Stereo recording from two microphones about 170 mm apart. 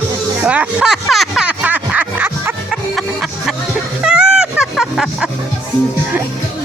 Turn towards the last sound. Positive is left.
turn(degrees=0)  # may be behind; listen again after turning